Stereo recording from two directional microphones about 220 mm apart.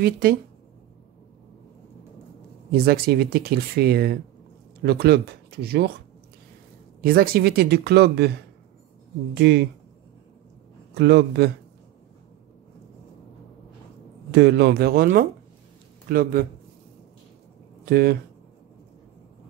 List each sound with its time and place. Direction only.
0.0 s speech: 45° right (ahead or behind)
2.7 s speech: 45° right (ahead or behind)
7.0 s speech: 45° right (ahead or behind)
9.4 s speech: 50° right (ahead or behind)
11.0 s speech: 50° right (ahead or behind)
14.3 s speech: 50° right (ahead or behind)
17.8 s speech: 45° right (ahead or behind)